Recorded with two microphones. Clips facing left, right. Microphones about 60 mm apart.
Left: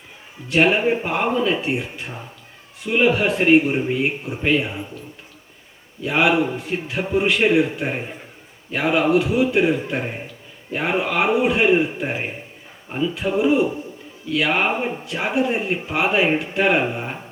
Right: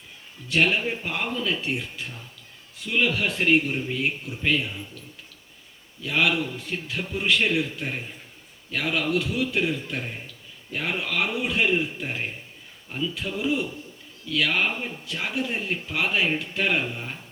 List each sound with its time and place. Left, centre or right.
0.4 s a man's voice: left